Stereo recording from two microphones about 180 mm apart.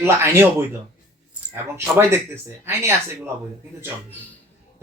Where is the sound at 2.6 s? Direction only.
15° right (ahead or behind).